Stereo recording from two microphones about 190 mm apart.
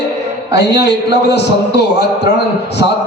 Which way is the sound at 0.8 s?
65° left (ahead or behind).